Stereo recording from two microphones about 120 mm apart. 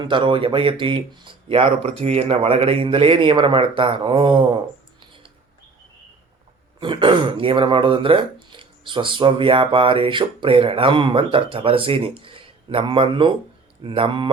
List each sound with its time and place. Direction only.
0.0 s speech: 45° right (ahead or behind)
4.9 s a sound: 45° right (ahead or behind)
6.7 s speech: 45° right (ahead or behind)